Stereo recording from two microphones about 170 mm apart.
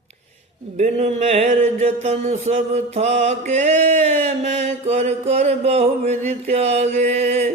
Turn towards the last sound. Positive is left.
turn(degrees=-40)  # may be behind; listen again after turning